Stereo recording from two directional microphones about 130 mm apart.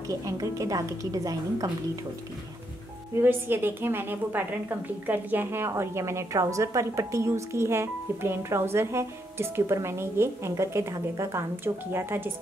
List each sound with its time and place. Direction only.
0.1 s a woman's voice: 25° right (ahead or behind)
3.2 s a woman's voice: 15° right (ahead or behind)